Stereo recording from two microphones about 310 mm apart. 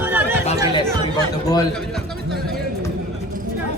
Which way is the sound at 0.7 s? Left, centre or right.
Centre.